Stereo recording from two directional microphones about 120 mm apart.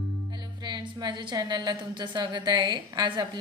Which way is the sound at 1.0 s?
35° right (ahead or behind).